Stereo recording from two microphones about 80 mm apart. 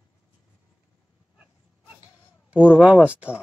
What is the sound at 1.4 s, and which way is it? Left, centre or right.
Dog, centre.